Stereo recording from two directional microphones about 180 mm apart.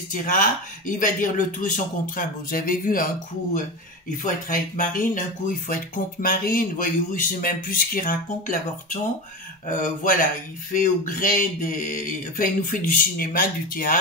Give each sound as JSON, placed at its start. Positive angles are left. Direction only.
{"t": 0.1, "sound": "speech", "side_deg": 45}
{"t": 4.2, "sound": "speech", "side_deg": 45}
{"t": 9.7, "sound": "speech", "side_deg": 45}